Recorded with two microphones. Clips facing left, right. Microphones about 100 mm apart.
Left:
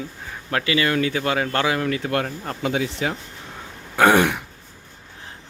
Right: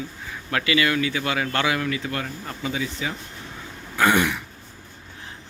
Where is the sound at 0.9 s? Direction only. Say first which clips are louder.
Left 3 dB; 45° left (ahead or behind).